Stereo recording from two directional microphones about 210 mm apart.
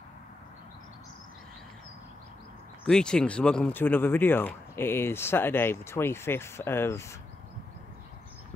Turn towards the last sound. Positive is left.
turn(degrees=15)  # may be behind; listen again after turning